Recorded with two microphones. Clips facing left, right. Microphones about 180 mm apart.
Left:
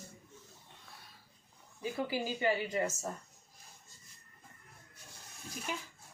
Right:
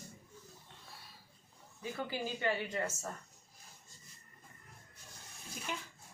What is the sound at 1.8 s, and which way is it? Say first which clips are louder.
A woman's voice: left 4 dB; 10° left (ahead or behind).